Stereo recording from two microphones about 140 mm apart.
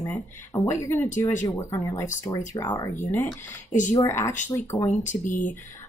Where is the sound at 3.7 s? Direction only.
60° left (ahead or behind).